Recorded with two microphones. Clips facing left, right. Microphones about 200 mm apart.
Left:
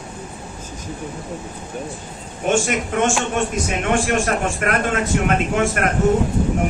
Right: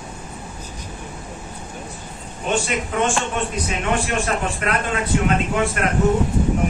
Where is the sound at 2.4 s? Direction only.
45° left (ahead or behind).